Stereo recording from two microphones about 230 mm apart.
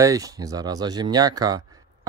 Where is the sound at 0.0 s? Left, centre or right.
Centre.